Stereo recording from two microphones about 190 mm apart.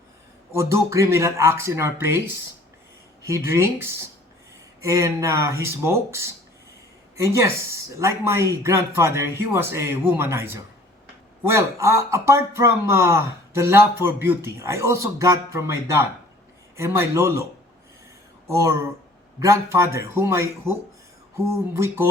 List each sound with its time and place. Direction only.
0.5 s a man's voice: 15° right (ahead or behind)
18.4 s a man's voice: 15° right (ahead or behind)
21.7 s a man's voice: 15° right (ahead or behind)